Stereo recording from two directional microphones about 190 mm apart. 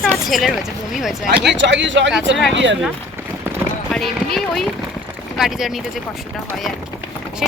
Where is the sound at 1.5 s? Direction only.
70° right (ahead or behind).